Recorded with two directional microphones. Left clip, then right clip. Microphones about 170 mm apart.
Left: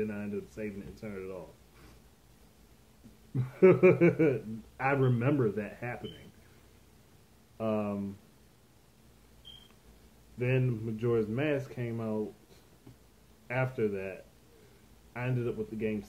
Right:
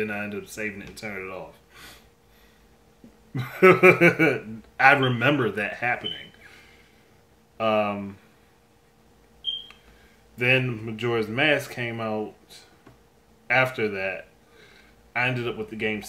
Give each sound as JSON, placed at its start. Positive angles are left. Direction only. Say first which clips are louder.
{"t": 0.0, "sound": "speech", "louder": "right 7 dB", "side_deg": -30}
{"t": 3.3, "sound": "speech", "louder": "right 7 dB", "side_deg": -25}
{"t": 7.5, "sound": "speech", "louder": "right 10 dB", "side_deg": -20}
{"t": 10.4, "sound": "speech", "louder": "right 11 dB", "side_deg": -25}
{"t": 13.5, "sound": "speech", "louder": "right 10 dB", "side_deg": -25}
{"t": 15.1, "sound": "speech", "louder": "right 10 dB", "side_deg": -25}